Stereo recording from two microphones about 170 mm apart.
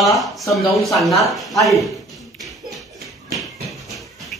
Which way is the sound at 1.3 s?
Centre (ahead or behind).